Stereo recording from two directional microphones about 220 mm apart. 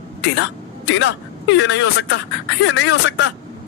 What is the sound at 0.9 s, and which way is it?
Speech, 55° left (ahead or behind).